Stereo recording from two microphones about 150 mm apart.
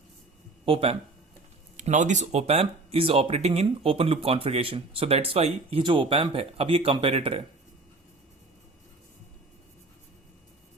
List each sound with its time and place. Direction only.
0.6 s speech: 40° right (ahead or behind)
1.7 s speech: 55° right (ahead or behind); by 7.4 s 40° right (ahead or behind)